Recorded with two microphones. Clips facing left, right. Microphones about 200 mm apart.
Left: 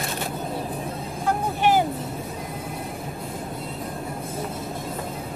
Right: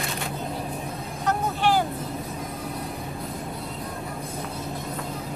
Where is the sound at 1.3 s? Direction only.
15° left (ahead or behind).